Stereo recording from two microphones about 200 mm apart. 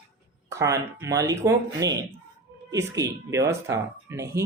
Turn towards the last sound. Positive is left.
turn(degrees=-15)  # may be behind; listen again after turning